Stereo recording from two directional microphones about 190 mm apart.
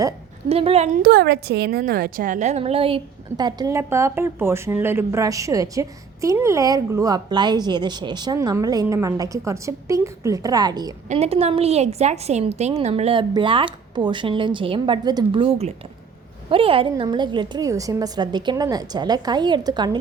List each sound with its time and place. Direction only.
0.4 s a woman's voice: 30° right (ahead or behind)
1.0 s a woman's voice: 55° right (ahead or behind); by 10.9 s 20° right (ahead or behind)
11.1 s a woman's voice: 35° right (ahead or behind)